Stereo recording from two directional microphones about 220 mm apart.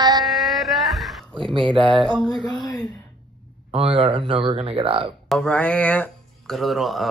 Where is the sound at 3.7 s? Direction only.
25° right (ahead or behind).